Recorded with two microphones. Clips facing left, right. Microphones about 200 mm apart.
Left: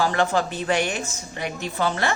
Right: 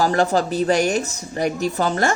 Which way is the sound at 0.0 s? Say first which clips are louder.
Right 3 dB; 40° right (ahead or behind).